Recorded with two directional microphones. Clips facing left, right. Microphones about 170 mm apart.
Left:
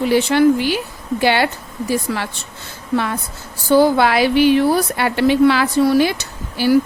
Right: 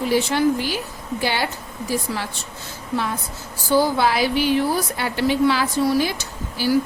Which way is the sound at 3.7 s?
65° left (ahead or behind).